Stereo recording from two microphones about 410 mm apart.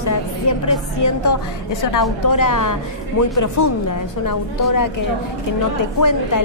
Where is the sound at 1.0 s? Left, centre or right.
Left.